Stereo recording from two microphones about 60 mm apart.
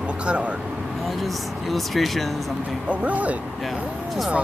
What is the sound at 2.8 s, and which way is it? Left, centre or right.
Speech, right.